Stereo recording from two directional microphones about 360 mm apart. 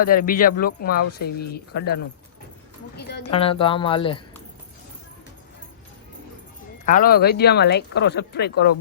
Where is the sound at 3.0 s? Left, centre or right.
Left.